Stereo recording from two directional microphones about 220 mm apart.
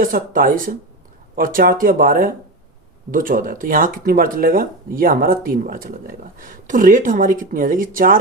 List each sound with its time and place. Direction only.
0.0 s speech: 40° right (ahead or behind)